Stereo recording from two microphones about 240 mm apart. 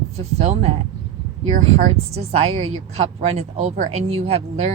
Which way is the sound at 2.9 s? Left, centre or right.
Right.